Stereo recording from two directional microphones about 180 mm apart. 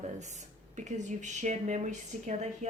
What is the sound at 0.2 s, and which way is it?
Speech, 40° right (ahead or behind).